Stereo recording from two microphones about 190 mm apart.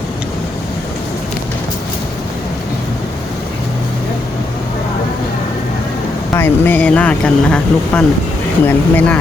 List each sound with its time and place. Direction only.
6.3 s speech: 10° left (ahead or behind)